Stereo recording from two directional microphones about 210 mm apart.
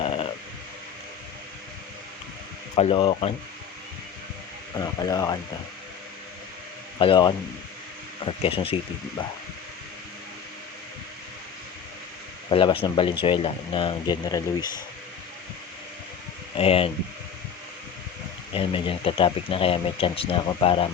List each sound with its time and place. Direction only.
0.0 s a sound: 25° left (ahead or behind)
2.7 s speech: 25° left (ahead or behind)
4.8 s speech: 15° left (ahead or behind)
7.0 s speech: 20° left (ahead or behind)
12.5 s speech: 25° left (ahead or behind)
16.6 s speech: 25° left (ahead or behind)
18.5 s speech: 25° left (ahead or behind)